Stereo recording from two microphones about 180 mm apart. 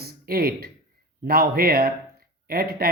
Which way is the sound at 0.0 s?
55° right (ahead or behind).